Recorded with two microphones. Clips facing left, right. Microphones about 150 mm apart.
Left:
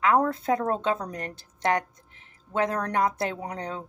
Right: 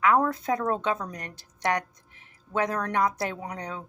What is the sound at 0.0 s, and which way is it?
A woman's voice, 30° left (ahead or behind).